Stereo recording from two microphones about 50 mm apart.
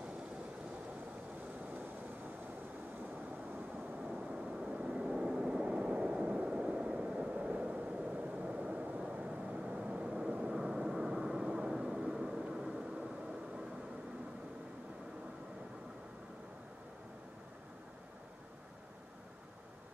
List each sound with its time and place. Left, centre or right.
4.1 s vehicle: right